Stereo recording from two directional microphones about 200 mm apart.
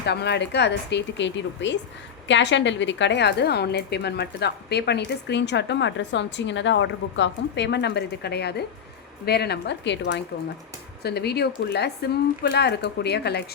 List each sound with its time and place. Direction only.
0.0 s a woman's voice: 55° left (ahead or behind)